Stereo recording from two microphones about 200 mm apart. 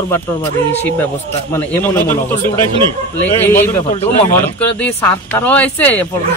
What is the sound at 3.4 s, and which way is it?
Speech, 10° left (ahead or behind).